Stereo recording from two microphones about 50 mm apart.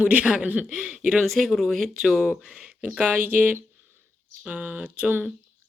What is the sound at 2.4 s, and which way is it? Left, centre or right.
Speech, right.